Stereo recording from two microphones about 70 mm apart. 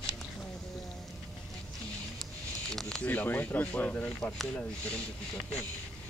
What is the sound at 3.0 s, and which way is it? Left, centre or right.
Speech, left.